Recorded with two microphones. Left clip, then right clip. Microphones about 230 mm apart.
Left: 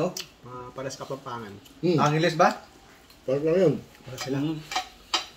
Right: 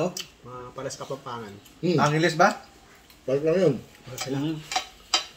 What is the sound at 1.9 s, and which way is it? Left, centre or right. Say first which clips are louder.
Speech: right 1 dB; centre.